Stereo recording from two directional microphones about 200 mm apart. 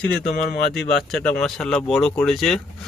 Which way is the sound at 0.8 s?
Centre (ahead or behind).